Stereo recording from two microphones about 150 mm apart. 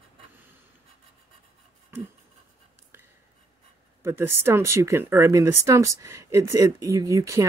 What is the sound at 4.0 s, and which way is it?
Speech, 15° right (ahead or behind).